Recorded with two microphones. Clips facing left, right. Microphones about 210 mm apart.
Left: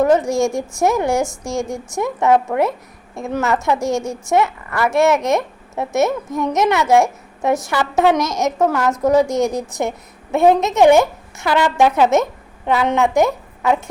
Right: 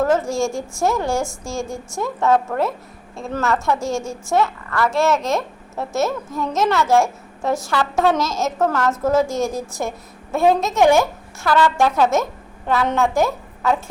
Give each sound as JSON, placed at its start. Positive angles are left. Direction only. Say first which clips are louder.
{"t": 0.0, "sound": "a woman's voice", "louder": "left 4 dB", "side_deg": 15}